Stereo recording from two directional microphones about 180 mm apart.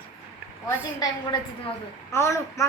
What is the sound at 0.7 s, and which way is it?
A woman's voice, 20° left (ahead or behind).